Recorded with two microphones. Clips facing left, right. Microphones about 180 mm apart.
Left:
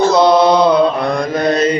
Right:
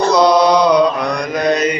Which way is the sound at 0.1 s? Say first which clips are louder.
Right 3 dB; 25° left (ahead or behind).